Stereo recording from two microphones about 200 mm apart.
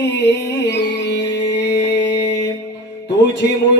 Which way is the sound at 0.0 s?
60° left (ahead or behind).